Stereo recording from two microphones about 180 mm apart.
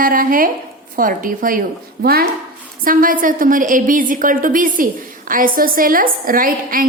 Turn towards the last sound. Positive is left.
turn(degrees=-50)  # may be behind; listen again after turning